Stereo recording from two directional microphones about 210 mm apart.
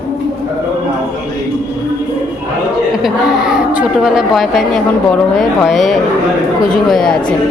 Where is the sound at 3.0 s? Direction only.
5° right (ahead or behind).